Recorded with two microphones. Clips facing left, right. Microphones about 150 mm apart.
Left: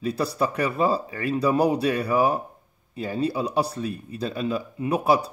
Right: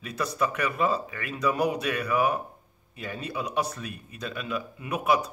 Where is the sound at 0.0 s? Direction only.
35° left (ahead or behind).